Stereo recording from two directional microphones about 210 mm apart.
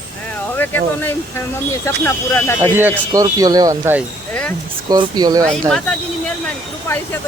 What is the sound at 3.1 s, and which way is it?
Speech, 15° right (ahead or behind).